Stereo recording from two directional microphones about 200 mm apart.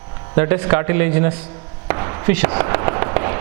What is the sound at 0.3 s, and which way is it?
A man's voice, 15° right (ahead or behind).